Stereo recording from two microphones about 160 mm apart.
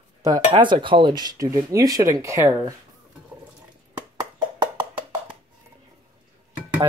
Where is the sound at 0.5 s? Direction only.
30° right (ahead or behind).